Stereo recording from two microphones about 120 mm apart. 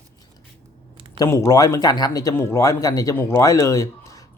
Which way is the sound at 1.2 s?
25° left (ahead or behind).